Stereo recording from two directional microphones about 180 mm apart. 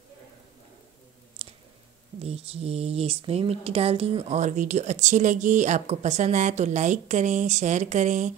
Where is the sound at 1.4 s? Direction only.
35° right (ahead or behind).